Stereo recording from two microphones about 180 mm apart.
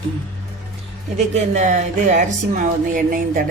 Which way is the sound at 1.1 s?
40° right (ahead or behind).